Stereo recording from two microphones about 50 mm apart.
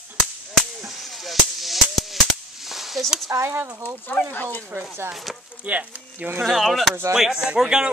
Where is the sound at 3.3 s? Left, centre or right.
Right.